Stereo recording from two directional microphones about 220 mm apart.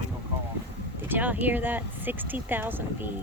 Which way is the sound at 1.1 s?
10° right (ahead or behind).